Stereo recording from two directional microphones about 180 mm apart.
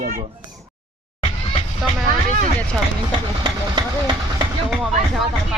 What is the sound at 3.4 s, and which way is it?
Speech, 20° right (ahead or behind).